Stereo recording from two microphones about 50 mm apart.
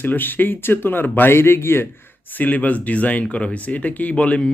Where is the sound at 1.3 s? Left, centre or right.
Left.